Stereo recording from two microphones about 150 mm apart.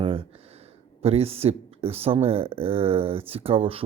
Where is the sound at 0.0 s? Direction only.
35° right (ahead or behind).